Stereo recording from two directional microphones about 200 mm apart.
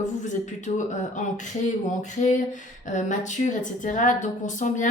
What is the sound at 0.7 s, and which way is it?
Speech, 35° left (ahead or behind).